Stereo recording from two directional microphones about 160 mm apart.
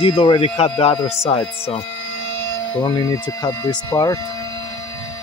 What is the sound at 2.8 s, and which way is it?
Speech, 25° left (ahead or behind).